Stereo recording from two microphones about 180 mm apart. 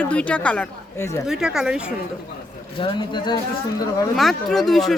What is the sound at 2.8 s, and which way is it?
Speech, 25° left (ahead or behind).